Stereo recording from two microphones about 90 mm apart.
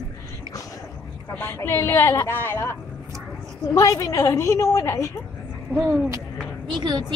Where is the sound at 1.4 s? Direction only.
30° left (ahead or behind).